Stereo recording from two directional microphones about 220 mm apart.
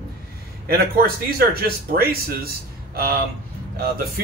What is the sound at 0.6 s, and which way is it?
Speech, 45° right (ahead or behind).